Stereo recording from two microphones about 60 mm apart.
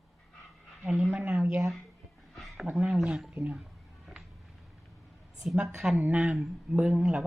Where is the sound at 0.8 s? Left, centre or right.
Centre.